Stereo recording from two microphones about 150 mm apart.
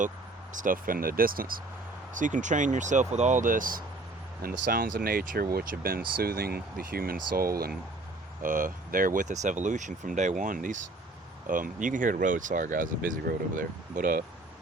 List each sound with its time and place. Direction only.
0.5 s speech: 65° right (ahead or behind)
2.1 s speech: 60° right (ahead or behind); by 7.7 s 85° right
8.4 s speech: 65° right (ahead or behind)